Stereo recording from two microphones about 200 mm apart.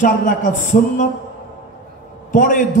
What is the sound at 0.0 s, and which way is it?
A man's voice, 40° left (ahead or behind).